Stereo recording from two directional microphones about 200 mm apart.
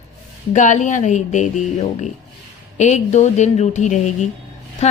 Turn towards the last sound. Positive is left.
turn(degrees=35)  # may be behind; listen again after turning